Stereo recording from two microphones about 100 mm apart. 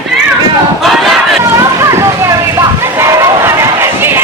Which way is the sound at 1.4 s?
30° right (ahead or behind).